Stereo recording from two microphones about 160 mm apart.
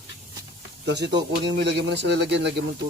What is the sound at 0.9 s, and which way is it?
Speech, 90° right.